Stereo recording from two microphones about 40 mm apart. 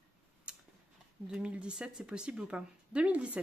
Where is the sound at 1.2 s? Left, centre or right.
Right.